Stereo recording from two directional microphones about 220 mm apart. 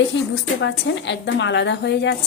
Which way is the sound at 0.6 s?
55° left (ahead or behind).